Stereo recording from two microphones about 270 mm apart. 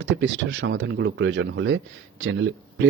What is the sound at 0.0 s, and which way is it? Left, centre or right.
Speech, right.